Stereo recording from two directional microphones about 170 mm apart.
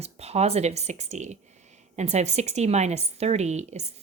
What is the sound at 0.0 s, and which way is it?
A woman's voice, 40° right (ahead or behind).